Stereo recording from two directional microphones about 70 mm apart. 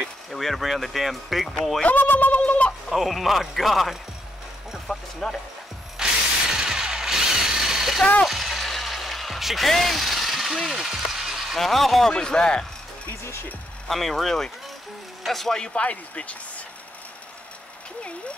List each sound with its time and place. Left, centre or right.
0.3 s speech: centre
1.8 s a sound: left
2.9 s speech: centre
4.8 s music: centre
6.0 s ratchet: centre
6.5 s a sound: centre
12.1 s a man's voice: centre
13.2 s speech: left
13.8 s a man's voice: centre